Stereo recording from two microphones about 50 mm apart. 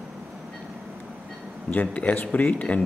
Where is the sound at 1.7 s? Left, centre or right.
Left.